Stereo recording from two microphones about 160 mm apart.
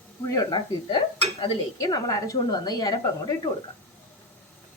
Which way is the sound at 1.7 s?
25° left (ahead or behind).